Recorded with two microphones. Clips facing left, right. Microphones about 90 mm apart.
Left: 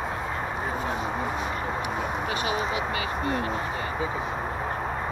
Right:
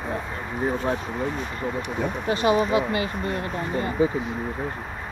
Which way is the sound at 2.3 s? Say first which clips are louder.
Right 11 dB; 40° right (ahead or behind).